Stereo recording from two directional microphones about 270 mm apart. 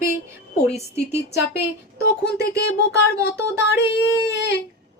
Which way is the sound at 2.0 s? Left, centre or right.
Left.